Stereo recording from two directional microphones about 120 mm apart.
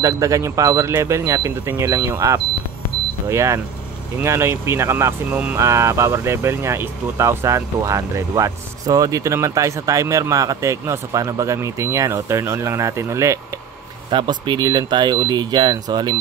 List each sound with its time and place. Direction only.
0.0 s speech: 25° right (ahead or behind)
14.1 s speech: 40° right (ahead or behind)